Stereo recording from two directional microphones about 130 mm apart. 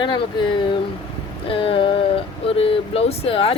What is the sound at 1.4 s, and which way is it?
Speech, 45° left (ahead or behind).